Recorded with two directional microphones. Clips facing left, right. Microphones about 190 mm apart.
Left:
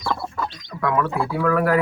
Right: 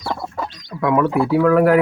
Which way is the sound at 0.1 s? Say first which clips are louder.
Right 1 dB; 15° right (ahead or behind).